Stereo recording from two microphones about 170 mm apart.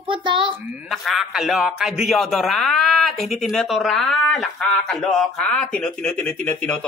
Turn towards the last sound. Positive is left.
turn(degrees=5)  # may be behind; listen again after turning